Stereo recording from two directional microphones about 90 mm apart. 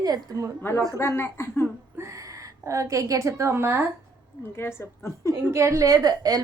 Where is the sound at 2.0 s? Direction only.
35° right (ahead or behind).